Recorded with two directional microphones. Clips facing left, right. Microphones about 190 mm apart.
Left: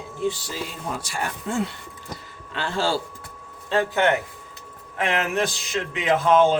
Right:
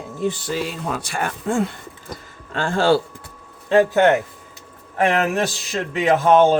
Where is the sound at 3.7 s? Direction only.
45° right (ahead or behind).